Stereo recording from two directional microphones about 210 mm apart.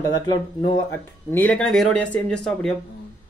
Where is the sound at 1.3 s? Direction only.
5° left (ahead or behind).